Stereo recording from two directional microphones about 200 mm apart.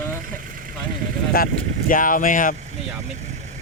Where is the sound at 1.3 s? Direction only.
45° left (ahead or behind).